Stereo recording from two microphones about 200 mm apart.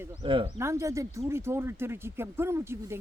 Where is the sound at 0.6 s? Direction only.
15° right (ahead or behind).